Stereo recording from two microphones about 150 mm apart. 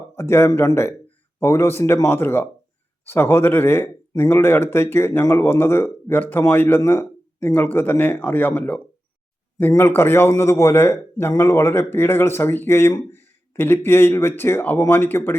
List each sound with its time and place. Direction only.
0.2 s a man's voice: 15° left (ahead or behind)